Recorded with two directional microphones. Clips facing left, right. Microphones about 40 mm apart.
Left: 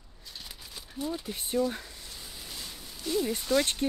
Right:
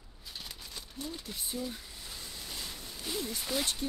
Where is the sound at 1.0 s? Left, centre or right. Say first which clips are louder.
Left 8 dB; centre.